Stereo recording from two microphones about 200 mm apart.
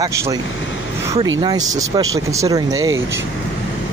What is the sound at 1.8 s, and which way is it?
Speech, 15° right (ahead or behind).